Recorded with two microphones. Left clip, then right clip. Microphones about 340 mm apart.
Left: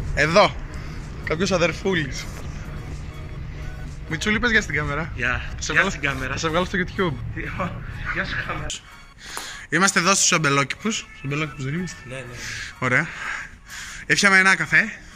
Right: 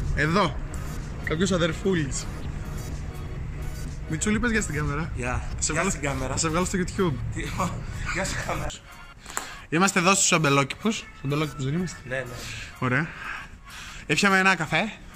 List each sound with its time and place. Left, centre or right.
0.1 s speech: centre
4.1 s speech: centre
5.9 s speech: centre
6.3 s speech: centre
7.3 s a man's voice: centre
9.7 s a man's voice: centre